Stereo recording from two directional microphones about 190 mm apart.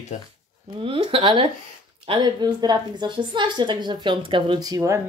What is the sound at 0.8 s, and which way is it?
A woman's voice, 30° right (ahead or behind).